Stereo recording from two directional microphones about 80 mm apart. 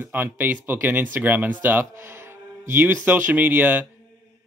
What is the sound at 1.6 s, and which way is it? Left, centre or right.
Music, right.